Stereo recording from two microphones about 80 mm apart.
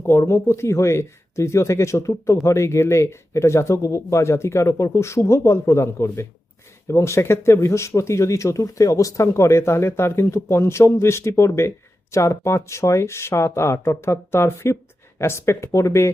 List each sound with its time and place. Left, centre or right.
0.0 s speech: left